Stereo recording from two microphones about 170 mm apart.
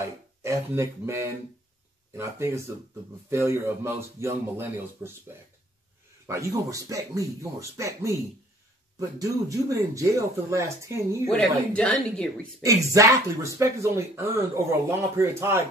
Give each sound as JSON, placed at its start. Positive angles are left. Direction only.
{"t": 0.4, "sound": "speech", "side_deg": -15}
{"t": 6.2, "sound": "speech", "side_deg": -20}
{"t": 9.2, "sound": "speech", "side_deg": -20}
{"t": 11.2, "sound": "speech", "side_deg": 5}
{"t": 12.6, "sound": "speech", "side_deg": -20}